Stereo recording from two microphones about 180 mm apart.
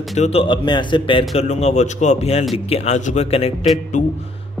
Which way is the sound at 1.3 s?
40° left (ahead or behind).